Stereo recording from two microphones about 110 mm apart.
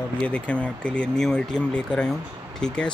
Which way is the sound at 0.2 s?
10° left (ahead or behind).